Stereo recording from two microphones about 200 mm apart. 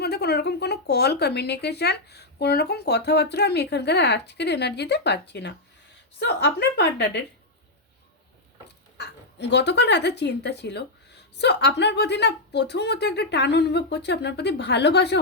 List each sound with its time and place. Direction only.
0.0 s speech: 55° left (ahead or behind)
9.0 s speech: 60° left (ahead or behind)